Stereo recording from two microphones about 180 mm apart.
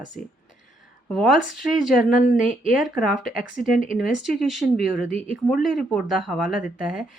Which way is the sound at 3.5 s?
50° left (ahead or behind).